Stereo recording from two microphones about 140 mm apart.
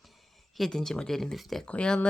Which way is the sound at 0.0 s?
Centre (ahead or behind).